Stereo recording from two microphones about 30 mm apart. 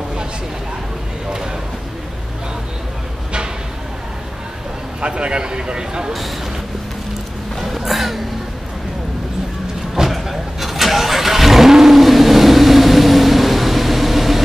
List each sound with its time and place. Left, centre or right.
5.0 s speech: right
7.6 s a sound: centre
10.0 s vehicle: centre